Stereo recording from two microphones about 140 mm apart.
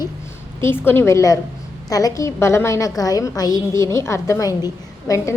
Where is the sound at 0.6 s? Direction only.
15° left (ahead or behind).